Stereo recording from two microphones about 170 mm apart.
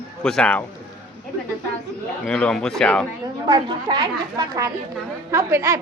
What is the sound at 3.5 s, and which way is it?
Speech, 25° right (ahead or behind).